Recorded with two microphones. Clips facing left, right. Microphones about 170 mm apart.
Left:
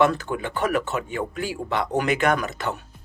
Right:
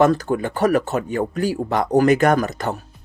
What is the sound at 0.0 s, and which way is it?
Speech, 40° right (ahead or behind).